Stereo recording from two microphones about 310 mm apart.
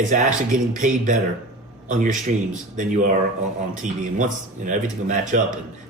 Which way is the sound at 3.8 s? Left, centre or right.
Right.